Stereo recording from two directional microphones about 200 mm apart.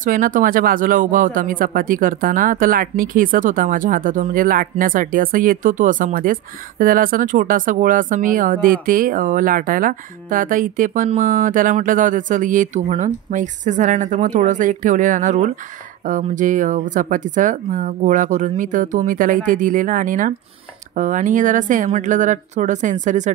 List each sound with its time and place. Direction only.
0.0 s speech: 45° right (ahead or behind)